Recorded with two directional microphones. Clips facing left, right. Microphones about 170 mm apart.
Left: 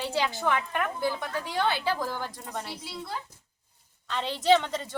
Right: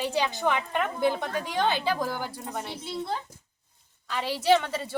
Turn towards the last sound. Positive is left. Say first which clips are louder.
# even
turn(degrees=-5)  # may be behind; listen again after turning